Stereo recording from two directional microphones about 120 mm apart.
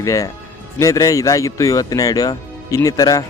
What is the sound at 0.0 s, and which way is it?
Speech, 30° left (ahead or behind).